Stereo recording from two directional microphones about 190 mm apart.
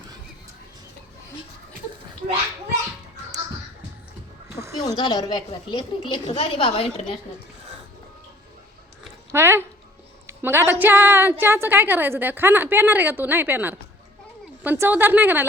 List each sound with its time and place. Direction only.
4.8 s a woman's voice: 20° left (ahead or behind)
9.3 s a woman's voice: 10° right (ahead or behind)